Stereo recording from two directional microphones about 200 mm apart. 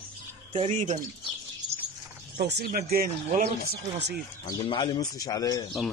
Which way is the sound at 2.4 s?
55° right (ahead or behind).